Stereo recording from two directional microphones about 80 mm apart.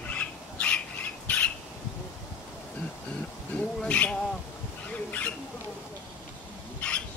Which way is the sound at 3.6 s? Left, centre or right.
Centre.